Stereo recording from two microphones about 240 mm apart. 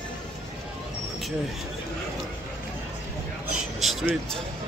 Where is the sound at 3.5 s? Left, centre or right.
Centre.